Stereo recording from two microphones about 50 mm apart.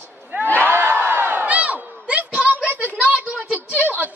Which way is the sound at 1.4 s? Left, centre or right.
Right.